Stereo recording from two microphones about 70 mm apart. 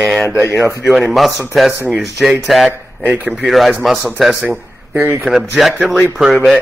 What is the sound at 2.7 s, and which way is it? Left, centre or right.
Speech, right.